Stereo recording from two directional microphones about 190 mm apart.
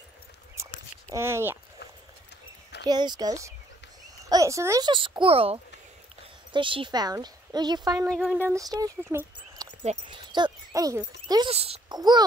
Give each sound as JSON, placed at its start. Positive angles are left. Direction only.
{"t": 1.1, "sound": "speech", "side_deg": -15}
{"t": 2.8, "sound": "speech", "side_deg": -20}
{"t": 8.1, "sound": "speech", "side_deg": 0}
{"t": 8.4, "sound": "speech", "side_deg": -15}
{"t": 11.5, "sound": "a child's voice", "side_deg": -30}
{"t": 12.0, "sound": "speech", "side_deg": -20}